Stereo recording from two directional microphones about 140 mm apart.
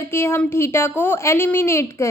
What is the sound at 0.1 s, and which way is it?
A woman's voice, 15° left (ahead or behind).